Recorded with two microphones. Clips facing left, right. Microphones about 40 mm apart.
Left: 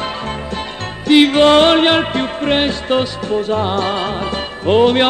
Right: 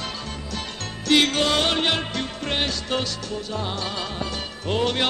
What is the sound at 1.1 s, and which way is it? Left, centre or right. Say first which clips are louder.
Music: left 9 dB; left.